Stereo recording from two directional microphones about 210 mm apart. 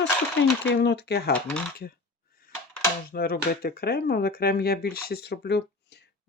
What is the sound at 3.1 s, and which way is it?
Speech, 45° left (ahead or behind).